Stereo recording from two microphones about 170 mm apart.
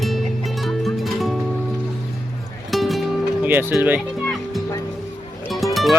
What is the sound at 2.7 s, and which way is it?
Music, centre (ahead or behind).